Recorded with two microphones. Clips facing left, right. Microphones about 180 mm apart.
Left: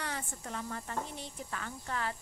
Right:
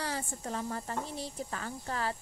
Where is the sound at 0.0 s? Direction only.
30° right (ahead or behind).